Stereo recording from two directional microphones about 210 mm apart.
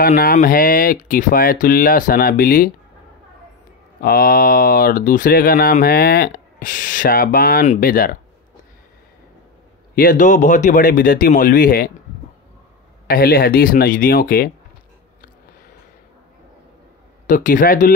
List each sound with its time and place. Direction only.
0.0 s speech: 45° left (ahead or behind)
4.0 s speech: 45° left (ahead or behind)
9.9 s speech: 40° left (ahead or behind)
13.0 s speech: 45° left (ahead or behind)
17.3 s speech: 40° left (ahead or behind)